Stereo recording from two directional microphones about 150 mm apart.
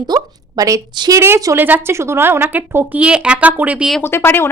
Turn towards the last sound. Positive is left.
turn(degrees=15)  # may be behind; listen again after turning